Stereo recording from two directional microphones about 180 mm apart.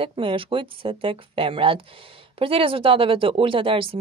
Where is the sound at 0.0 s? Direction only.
30° right (ahead or behind).